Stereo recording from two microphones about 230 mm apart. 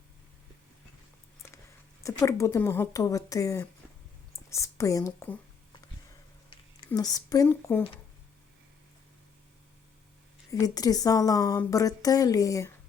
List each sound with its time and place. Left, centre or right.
2.0 s a woman's voice: centre
6.5 s speech: centre
10.5 s speech: centre